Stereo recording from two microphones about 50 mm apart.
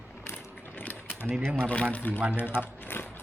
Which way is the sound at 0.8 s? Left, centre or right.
Left.